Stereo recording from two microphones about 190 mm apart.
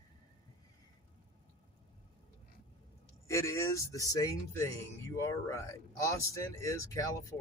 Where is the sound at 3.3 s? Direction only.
15° left (ahead or behind).